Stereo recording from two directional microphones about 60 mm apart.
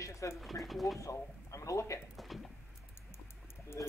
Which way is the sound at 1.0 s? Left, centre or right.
Left.